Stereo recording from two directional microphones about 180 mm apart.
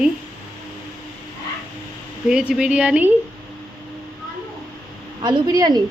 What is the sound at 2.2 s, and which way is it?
Speech, 5° right (ahead or behind).